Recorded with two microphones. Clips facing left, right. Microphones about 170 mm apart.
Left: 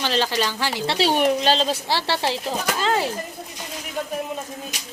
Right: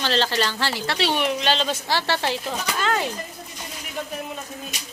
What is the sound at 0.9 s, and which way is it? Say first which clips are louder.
A woman's voice: left 5 dB; 35° left (ahead or behind).